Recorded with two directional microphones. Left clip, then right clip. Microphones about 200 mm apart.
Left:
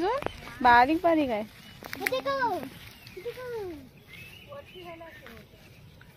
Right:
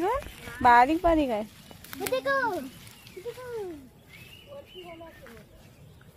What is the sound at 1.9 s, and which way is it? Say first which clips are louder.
Speech: right 2 dB; 60° right (ahead or behind).